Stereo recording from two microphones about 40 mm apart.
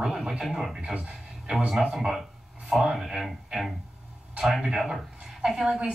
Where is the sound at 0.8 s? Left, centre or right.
Right.